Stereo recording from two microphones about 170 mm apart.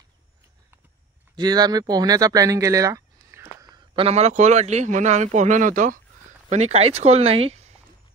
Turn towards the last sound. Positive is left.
turn(degrees=-40)  # may be behind; listen again after turning